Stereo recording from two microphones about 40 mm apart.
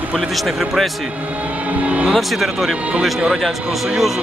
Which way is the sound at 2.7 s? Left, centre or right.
Right.